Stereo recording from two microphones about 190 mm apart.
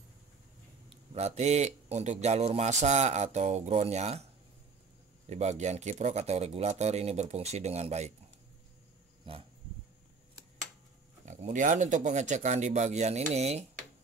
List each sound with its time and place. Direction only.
0.8 s speech: 35° right (ahead or behind)
5.3 s speech: 35° right (ahead or behind)
11.2 s speech: 40° right (ahead or behind)